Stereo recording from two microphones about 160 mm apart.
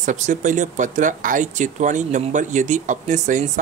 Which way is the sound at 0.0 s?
50° right (ahead or behind).